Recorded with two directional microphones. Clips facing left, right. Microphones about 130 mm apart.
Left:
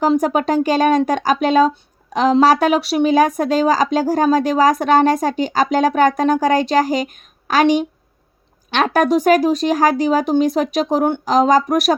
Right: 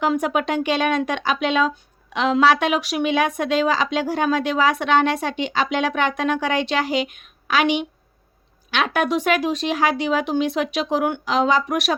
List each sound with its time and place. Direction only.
0.0 s a woman's voice: 35° left (ahead or behind)